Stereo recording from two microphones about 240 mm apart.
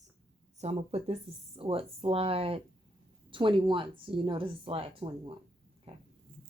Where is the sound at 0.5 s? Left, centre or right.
Right.